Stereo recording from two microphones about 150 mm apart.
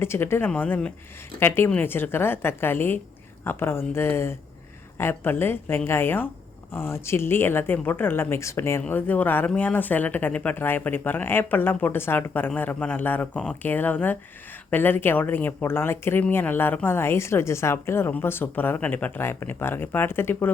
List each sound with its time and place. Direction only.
0.0 s speech: 15° left (ahead or behind)